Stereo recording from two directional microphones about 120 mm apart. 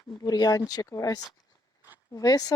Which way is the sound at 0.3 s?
35° left (ahead or behind).